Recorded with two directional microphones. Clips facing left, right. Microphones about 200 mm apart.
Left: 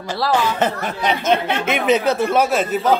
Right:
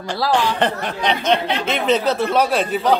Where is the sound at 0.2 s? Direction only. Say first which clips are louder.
Even; 5° left (ahead or behind).